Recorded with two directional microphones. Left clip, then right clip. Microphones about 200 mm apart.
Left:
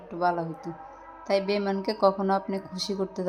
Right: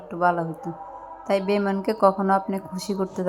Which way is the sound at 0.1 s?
20° right (ahead or behind).